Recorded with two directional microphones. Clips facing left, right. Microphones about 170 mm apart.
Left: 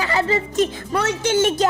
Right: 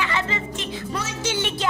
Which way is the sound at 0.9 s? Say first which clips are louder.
Left 9 dB; 60° left (ahead or behind).